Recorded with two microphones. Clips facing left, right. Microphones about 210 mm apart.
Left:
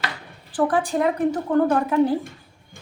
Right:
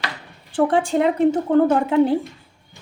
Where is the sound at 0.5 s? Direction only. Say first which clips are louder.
Right 3 dB; 25° right (ahead or behind).